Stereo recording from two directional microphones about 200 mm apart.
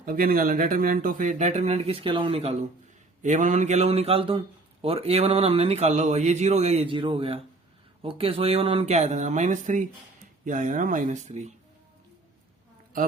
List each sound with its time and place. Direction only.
0.0 s a man's voice: 45° right (ahead or behind)
12.9 s a man's voice: 45° right (ahead or behind)